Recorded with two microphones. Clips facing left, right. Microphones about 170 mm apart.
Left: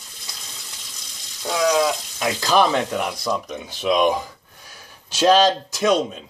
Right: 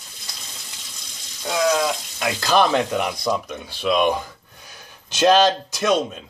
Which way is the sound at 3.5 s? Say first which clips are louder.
Left 1 dB; 20° left (ahead or behind).